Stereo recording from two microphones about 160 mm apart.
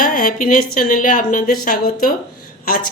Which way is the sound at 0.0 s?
60° left (ahead or behind).